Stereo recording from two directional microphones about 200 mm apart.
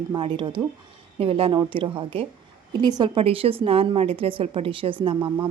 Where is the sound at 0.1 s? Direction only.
25° right (ahead or behind).